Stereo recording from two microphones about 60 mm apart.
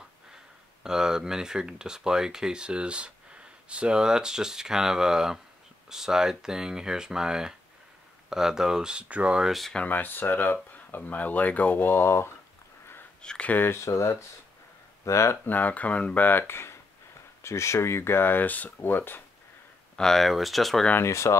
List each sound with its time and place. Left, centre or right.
0.8 s speech: centre
9.4 s speech: centre
9.8 s speech: left
13.2 s speech: centre
13.5 s speech: left
13.7 s speech: left
15.4 s speech: left
20.0 s speech: centre
21.0 s speech: left